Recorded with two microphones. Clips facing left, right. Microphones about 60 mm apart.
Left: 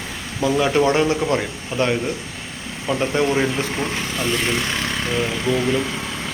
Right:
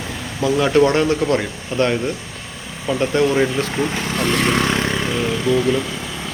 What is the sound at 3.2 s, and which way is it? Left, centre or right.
Speech, centre.